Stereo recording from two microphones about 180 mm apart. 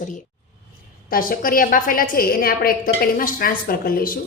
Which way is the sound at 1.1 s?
50° left (ahead or behind).